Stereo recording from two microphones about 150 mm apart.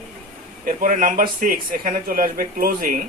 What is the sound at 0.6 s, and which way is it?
A man's voice, 65° right (ahead or behind).